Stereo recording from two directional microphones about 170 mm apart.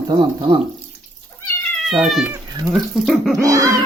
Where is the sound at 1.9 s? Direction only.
Centre (ahead or behind).